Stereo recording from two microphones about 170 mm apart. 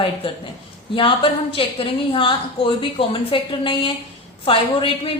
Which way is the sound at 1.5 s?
30° left (ahead or behind).